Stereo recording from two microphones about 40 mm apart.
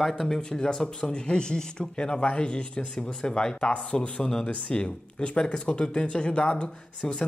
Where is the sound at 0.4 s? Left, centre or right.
Centre.